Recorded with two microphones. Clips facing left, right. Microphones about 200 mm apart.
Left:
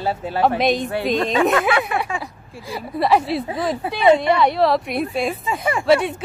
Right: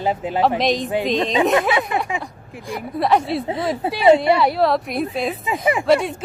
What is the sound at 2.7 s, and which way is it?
Speech, centre (ahead or behind).